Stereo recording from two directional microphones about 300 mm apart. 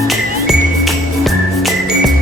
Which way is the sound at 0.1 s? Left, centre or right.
Centre.